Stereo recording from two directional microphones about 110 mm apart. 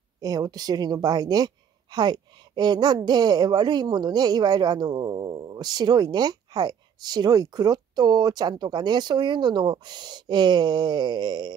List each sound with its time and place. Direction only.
0.2 s a woman's voice: 35° right (ahead or behind)